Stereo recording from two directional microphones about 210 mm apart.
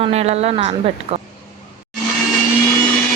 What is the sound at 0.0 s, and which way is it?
Speech, 30° right (ahead or behind).